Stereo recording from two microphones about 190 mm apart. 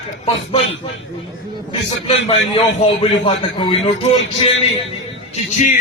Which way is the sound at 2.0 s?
30° left (ahead or behind).